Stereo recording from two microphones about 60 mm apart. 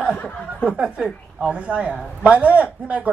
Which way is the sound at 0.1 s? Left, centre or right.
Left.